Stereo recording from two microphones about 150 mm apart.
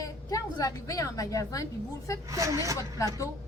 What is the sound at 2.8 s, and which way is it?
Speech, 20° left (ahead or behind).